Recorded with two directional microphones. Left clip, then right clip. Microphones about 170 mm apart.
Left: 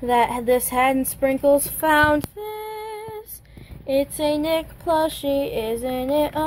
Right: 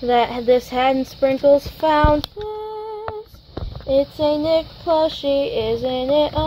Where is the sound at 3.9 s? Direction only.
5° right (ahead or behind).